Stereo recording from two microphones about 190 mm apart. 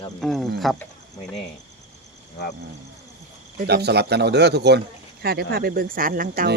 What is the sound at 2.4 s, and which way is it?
Speech, 60° left (ahead or behind).